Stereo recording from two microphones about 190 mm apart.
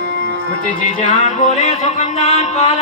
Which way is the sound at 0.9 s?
40° left (ahead or behind).